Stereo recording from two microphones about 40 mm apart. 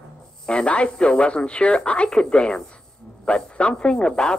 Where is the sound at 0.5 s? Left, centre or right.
Left.